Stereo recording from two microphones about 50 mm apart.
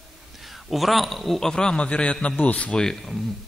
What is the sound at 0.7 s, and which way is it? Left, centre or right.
Speech, centre.